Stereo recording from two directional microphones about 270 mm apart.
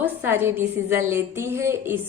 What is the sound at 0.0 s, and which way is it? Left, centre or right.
A woman's voice, centre.